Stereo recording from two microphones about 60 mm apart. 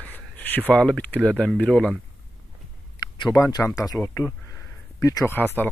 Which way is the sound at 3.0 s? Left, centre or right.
Left.